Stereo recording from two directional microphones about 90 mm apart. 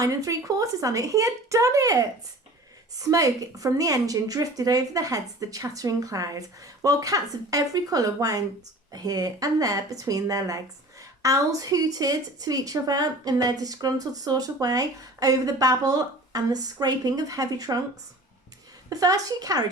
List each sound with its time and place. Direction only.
0.0 s a woman's voice: 40° right (ahead or behind)
18.9 s speech: 40° right (ahead or behind)